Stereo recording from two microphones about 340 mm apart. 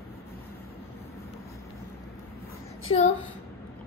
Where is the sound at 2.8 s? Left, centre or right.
Centre.